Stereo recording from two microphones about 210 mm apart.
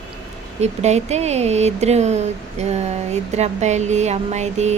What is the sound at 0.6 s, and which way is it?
Speech, 30° right (ahead or behind).